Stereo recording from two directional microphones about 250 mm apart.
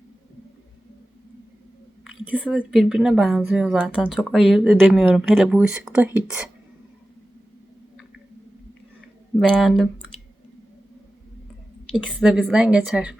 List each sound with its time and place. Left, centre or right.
2.0 s a woman's voice: centre
9.4 s a woman's voice: centre
12.0 s a woman's voice: centre